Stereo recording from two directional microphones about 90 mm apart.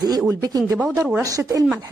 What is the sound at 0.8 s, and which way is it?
Speech, 10° right (ahead or behind).